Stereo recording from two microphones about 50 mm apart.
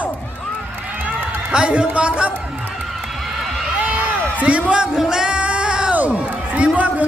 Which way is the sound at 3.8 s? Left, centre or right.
Right.